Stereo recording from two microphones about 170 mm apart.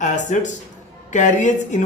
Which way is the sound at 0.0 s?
45° left (ahead or behind).